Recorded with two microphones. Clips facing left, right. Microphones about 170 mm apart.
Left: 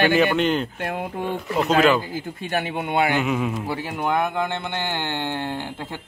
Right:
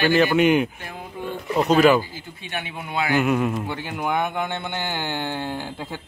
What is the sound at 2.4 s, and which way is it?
Speech, 35° left (ahead or behind).